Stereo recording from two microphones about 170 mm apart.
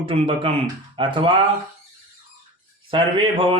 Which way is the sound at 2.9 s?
30° right (ahead or behind).